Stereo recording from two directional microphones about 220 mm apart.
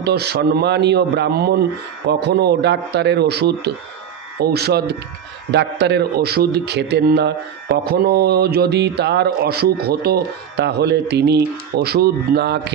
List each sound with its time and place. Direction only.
0.0 s a man's voice: 45° right (ahead or behind)